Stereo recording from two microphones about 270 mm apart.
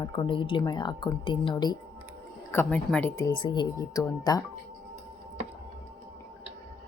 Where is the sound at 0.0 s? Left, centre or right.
Centre.